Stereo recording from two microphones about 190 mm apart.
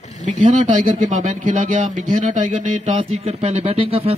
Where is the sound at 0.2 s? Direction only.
40° right (ahead or behind).